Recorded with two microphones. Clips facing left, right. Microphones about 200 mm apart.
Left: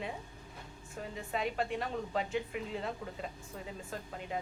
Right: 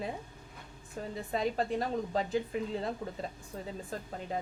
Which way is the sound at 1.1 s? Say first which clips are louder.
Right 4 dB; 35° right (ahead or behind).